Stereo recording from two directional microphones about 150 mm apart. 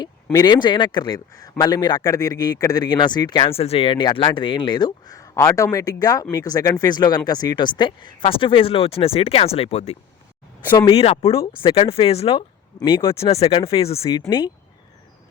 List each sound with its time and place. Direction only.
0.4 s a man's voice: 30° left (ahead or behind)
14.0 s a man's voice: 25° left (ahead or behind)